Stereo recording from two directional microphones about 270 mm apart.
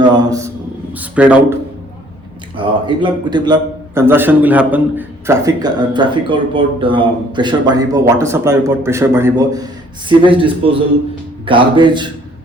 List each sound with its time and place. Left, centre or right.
0.0 s a sound: centre
0.9 s a man's voice: centre
2.6 s a man's voice: centre